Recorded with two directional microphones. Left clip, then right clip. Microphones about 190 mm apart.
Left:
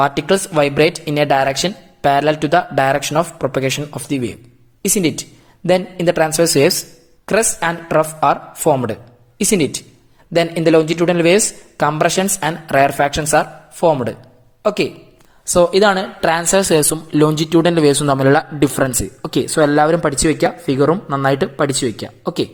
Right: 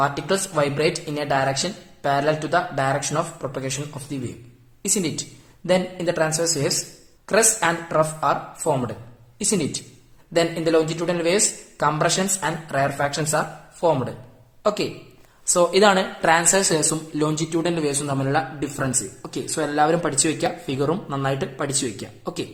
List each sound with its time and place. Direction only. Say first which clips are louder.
0.0 s a woman's voice: left 7 dB; 40° left (ahead or behind)
20.9 s speech: left 8 dB; 15° left (ahead or behind)
21.2 s speech: left 10 dB; 35° left (ahead or behind)